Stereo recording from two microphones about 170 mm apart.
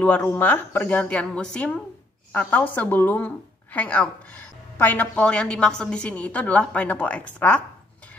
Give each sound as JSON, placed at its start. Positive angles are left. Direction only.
{"t": 0.0, "sound": "speech", "side_deg": 10}